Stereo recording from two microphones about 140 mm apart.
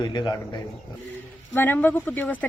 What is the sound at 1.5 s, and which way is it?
Speech, 15° left (ahead or behind).